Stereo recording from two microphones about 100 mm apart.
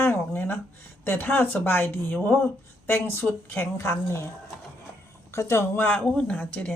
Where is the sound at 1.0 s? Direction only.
20° left (ahead or behind).